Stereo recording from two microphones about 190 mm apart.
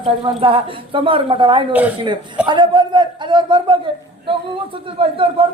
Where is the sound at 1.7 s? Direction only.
5° right (ahead or behind).